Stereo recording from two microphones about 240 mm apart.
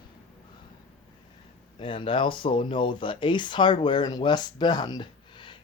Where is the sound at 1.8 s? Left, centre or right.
Left.